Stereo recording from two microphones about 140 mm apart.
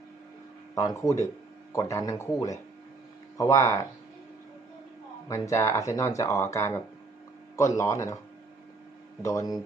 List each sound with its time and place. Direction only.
0.8 s speech: 20° left (ahead or behind)
5.3 s speech: 20° left (ahead or behind)
9.2 s speech: 25° left (ahead or behind)